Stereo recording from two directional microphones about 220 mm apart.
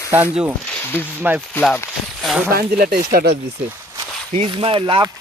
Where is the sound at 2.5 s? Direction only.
40° right (ahead or behind).